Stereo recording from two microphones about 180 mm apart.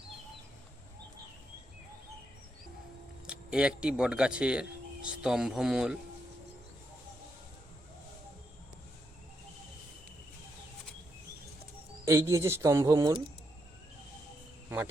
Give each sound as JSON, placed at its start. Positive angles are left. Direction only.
{"t": 3.2, "sound": "speech", "side_deg": -5}
{"t": 12.0, "sound": "speech", "side_deg": -15}